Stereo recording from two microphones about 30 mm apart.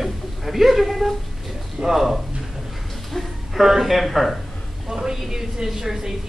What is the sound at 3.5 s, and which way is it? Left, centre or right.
Speech, centre.